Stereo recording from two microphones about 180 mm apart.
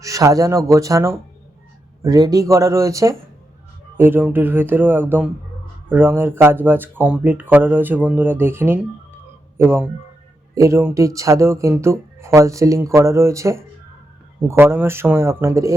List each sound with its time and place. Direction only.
0.0 s speech: 20° right (ahead or behind)